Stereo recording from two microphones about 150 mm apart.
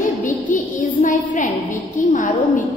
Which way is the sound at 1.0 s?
60° left (ahead or behind).